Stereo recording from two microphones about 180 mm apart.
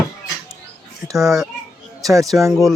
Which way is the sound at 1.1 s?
15° right (ahead or behind).